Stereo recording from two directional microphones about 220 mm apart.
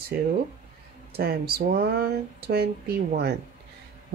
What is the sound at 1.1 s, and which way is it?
Speech, 45° right (ahead or behind).